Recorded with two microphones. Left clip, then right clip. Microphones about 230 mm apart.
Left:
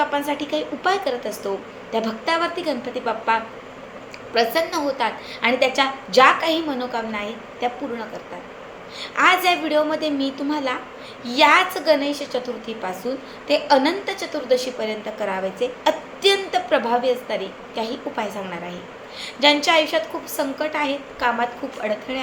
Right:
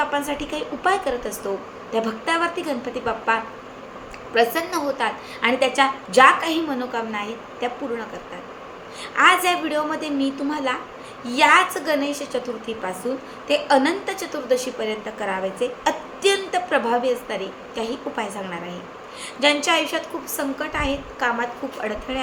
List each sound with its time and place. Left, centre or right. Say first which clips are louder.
0.3 s a woman's voice: left 3 dB; centre
9.1 s a woman's voice: even; centre